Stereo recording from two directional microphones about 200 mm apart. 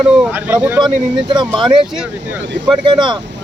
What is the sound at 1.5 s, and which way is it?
Speech, 25° right (ahead or behind).